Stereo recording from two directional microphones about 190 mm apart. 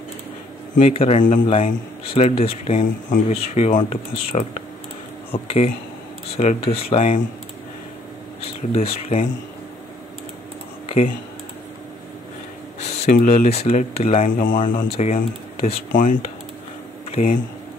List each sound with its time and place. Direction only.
0.7 s a man's voice: 35° left (ahead or behind)
8.7 s a man's voice: 35° left (ahead or behind)
13.0 s a man's voice: 40° left (ahead or behind)